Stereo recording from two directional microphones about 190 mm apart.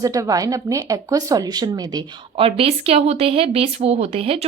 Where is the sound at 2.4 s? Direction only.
30° right (ahead or behind).